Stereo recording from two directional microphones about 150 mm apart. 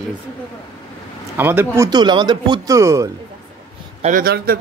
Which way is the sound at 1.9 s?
30° right (ahead or behind).